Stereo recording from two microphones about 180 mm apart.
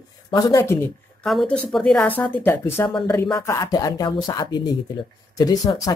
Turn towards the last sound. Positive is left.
turn(degrees=20)  # may be behind; listen again after turning